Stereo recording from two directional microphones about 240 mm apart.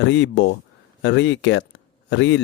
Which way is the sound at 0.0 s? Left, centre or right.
Left.